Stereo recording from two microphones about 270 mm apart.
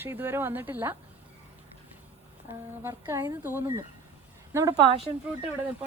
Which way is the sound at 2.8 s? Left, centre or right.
Centre.